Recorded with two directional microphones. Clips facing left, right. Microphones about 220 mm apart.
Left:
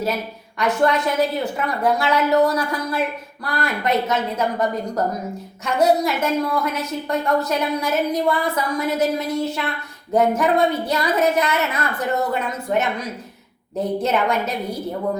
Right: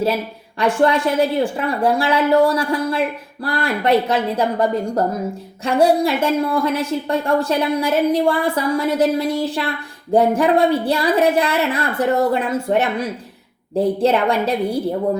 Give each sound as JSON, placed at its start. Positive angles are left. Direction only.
{"t": 0.6, "sound": "a woman's voice", "side_deg": -30}